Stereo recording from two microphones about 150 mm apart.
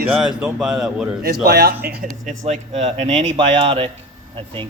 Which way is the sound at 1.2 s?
90° right.